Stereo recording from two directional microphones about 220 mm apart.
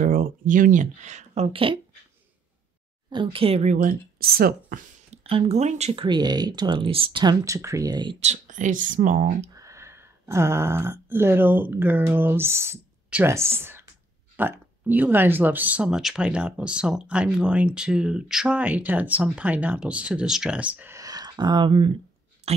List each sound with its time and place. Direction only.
0.0 s speech: 40° right (ahead or behind); by 1.8 s 25° right (ahead or behind)
3.1 s speech: 25° right (ahead or behind); by 4.7 s 45° right (ahead or behind)
5.1 s speech: 30° right (ahead or behind)
8.2 s speech: 35° right (ahead or behind)
9.6 s speech: 15° right (ahead or behind)